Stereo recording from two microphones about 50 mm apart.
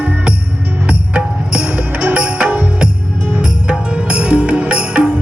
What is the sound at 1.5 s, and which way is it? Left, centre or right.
Music, right.